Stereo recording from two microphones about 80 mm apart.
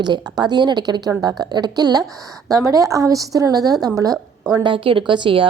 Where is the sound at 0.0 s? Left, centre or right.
Right.